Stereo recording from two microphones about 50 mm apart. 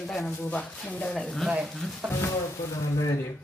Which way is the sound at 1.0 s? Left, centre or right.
Centre.